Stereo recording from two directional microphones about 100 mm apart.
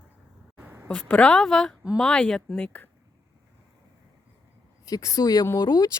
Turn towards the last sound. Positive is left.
turn(degrees=40)  # may be behind; listen again after turning